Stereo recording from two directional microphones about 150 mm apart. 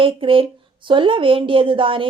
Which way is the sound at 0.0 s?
35° right (ahead or behind).